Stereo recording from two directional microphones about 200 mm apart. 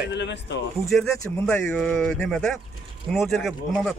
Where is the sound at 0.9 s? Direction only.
5° left (ahead or behind).